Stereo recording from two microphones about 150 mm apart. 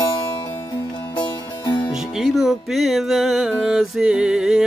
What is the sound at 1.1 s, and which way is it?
Music, 30° left (ahead or behind).